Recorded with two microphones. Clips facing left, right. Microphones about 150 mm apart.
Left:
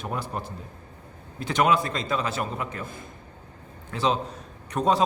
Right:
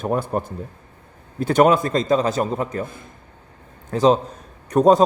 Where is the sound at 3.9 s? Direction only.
40° right (ahead or behind).